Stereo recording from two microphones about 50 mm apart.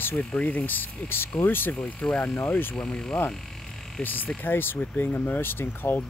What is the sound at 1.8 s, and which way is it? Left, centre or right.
Speech, left.